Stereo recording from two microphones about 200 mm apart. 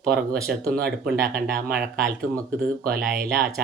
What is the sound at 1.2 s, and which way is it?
Speech, 45° right (ahead or behind).